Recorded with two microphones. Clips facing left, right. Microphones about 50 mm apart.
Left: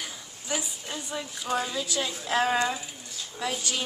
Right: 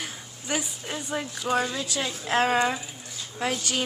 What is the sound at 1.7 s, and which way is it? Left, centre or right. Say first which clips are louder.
Speech: even; right.